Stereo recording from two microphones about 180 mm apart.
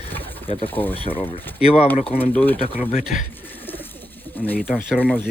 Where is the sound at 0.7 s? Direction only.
10° left (ahead or behind).